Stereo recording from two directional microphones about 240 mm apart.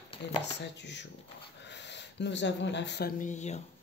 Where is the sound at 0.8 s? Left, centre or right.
Left.